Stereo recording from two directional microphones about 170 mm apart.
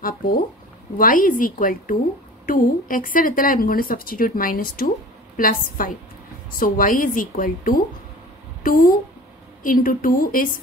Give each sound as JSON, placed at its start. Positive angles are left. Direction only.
{"t": 0.9, "sound": "a woman's voice", "side_deg": 55}